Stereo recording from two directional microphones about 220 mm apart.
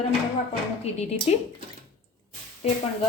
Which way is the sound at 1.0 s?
30° left (ahead or behind).